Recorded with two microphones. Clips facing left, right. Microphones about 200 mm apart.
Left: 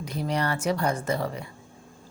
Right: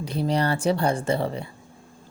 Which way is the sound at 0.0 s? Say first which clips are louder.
Right 4 dB; 30° right (ahead or behind).